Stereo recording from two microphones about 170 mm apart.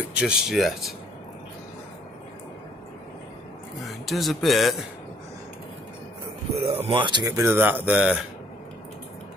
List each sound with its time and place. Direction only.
0.1 s speech: 5° right (ahead or behind)
3.8 s speech: centre (ahead or behind)
6.5 s speech: 35° right (ahead or behind); by 8.3 s 5° right (ahead or behind)